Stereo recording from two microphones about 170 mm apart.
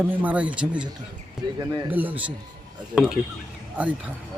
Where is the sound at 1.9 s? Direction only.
10° right (ahead or behind).